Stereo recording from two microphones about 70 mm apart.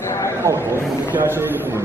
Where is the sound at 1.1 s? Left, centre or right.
Right.